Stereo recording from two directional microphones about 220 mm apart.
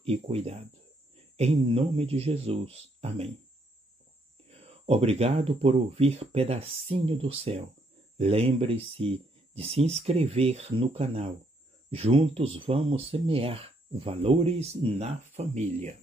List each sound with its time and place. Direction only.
0.0 s speech: 25° right (ahead or behind)
4.5 s speech: 25° right (ahead or behind)